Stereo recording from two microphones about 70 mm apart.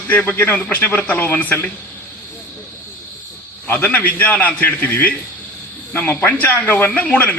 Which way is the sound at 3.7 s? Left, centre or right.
Left.